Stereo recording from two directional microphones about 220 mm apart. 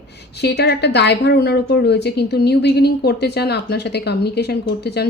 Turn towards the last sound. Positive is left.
turn(degrees=50)  # may be behind; listen again after turning